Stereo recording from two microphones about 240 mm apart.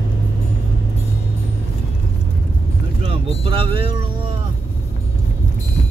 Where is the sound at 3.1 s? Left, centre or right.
Right.